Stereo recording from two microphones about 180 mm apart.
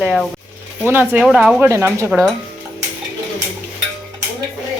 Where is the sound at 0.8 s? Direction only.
10° right (ahead or behind).